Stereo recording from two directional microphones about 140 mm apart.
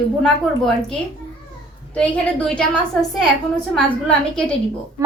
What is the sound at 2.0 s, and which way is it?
Speech, 5° left (ahead or behind).